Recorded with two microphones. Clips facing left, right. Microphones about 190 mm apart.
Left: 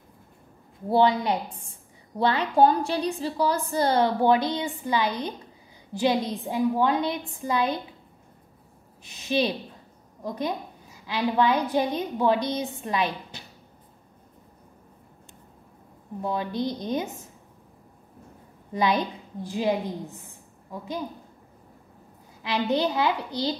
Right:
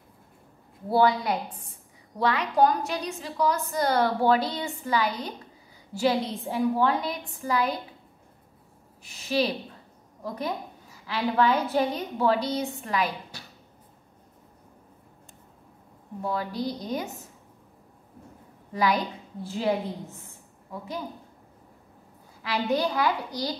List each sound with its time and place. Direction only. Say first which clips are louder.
0.8 s a woman's voice: left 1 dB; 20° left (ahead or behind)
9.0 s a woman's voice: left 1 dB; 20° left (ahead or behind)
16.2 s a woman's voice: left 2 dB; 20° left (ahead or behind)
18.7 s a woman's voice: left 1 dB; 20° left (ahead or behind)
22.4 s a woman's voice: left 1 dB; 20° left (ahead or behind)